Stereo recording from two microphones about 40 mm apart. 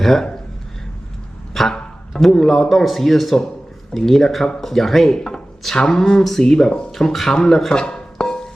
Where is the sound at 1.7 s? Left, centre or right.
Centre.